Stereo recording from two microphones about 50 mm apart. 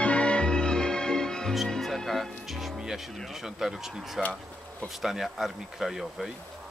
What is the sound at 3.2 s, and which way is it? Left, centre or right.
Speech, centre.